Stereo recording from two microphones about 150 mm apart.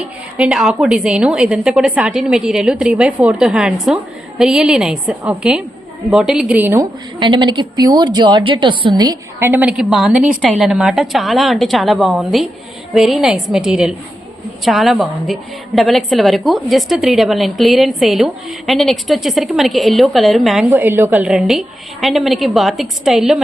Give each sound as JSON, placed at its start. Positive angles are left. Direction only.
{"t": 0.3, "sound": "a woman's voice", "side_deg": -5}
{"t": 7.2, "sound": "a woman's voice", "side_deg": -30}
{"t": 9.4, "sound": "a woman's voice", "side_deg": -15}
{"t": 20.7, "sound": "a woman's voice", "side_deg": -15}